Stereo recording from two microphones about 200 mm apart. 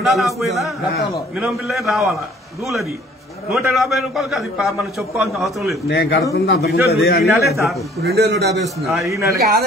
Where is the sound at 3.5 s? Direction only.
Centre (ahead or behind).